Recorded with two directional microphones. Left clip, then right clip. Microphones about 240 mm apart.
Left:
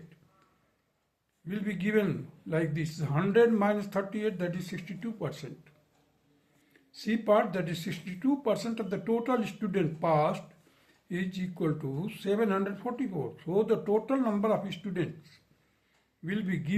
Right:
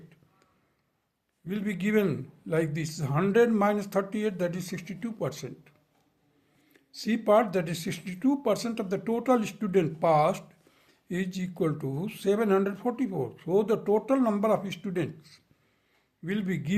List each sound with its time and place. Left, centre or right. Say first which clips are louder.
1.5 s speech: right 2 dB; right
6.9 s speech: right 3 dB; right